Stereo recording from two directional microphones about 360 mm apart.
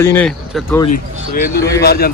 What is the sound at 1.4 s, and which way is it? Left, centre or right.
Speech, left.